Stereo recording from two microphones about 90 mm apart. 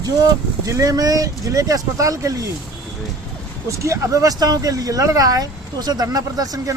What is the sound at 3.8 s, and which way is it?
Speech, 35° right (ahead or behind).